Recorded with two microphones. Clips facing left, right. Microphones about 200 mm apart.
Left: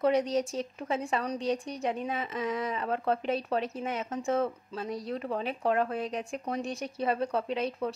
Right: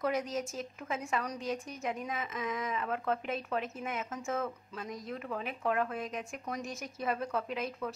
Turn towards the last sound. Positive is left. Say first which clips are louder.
# left 5 dB
turn(degrees=30)  # may be behind; listen again after turning